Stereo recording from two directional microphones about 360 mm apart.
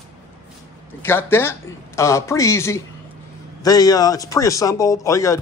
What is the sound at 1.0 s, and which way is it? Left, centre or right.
A man's voice, centre.